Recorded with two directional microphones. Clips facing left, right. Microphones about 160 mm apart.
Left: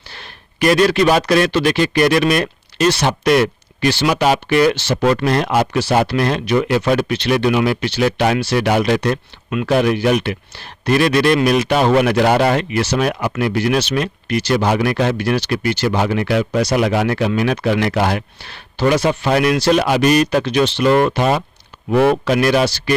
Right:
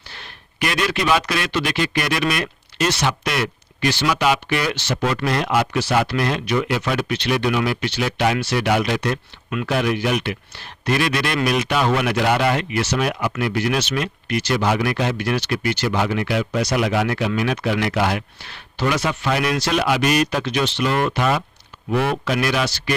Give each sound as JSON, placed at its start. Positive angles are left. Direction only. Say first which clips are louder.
{"t": 0.2, "sound": "speech", "louder": "left 7 dB", "side_deg": 40}
{"t": 9.6, "sound": "speech", "louder": "left 6 dB", "side_deg": 40}